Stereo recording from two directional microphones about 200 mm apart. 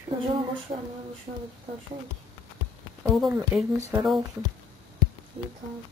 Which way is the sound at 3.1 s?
Centre (ahead or behind).